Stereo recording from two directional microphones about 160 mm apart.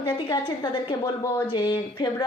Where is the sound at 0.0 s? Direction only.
30° left (ahead or behind).